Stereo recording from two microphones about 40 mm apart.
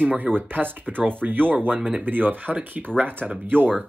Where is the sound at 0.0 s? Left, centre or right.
Right.